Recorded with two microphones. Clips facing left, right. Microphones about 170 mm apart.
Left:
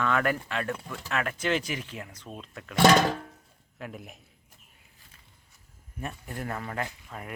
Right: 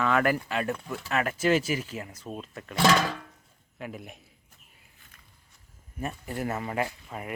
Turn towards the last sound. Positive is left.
turn(degrees=-10)  # may be behind; listen again after turning